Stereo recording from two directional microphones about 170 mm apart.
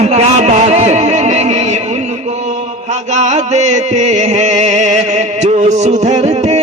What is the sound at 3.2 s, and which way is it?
Music, 40° right (ahead or behind).